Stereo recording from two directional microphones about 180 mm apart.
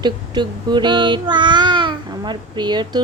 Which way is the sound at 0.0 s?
25° right (ahead or behind).